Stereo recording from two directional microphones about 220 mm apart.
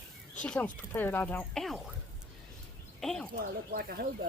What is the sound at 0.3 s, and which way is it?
Speech, 5° left (ahead or behind).